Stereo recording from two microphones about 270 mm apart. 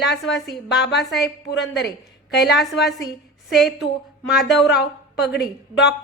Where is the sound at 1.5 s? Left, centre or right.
Left.